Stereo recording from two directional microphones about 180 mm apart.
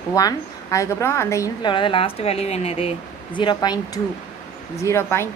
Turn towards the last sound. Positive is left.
turn(degrees=15)  # may be behind; listen again after turning